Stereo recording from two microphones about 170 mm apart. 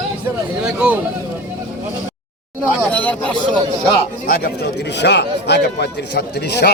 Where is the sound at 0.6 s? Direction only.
5° right (ahead or behind).